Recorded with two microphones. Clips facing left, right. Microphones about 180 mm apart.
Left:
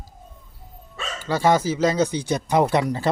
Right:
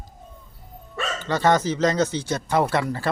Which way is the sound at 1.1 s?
10° left (ahead or behind).